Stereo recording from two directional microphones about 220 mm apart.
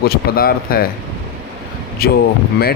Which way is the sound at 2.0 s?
45° left (ahead or behind).